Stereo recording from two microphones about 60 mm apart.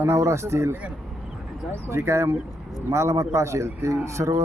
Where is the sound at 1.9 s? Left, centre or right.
Right.